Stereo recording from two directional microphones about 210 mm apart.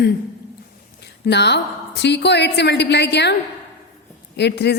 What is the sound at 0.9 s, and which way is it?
A woman's voice, 55° left (ahead or behind).